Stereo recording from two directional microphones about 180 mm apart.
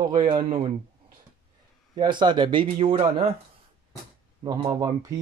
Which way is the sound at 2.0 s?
25° right (ahead or behind).